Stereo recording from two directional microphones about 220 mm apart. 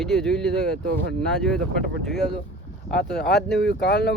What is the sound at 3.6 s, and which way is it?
Speech, 50° left (ahead or behind).